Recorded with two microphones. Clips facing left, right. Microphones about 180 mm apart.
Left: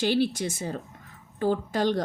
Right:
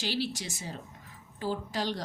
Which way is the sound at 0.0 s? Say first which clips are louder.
Left 9 dB; 55° left (ahead or behind).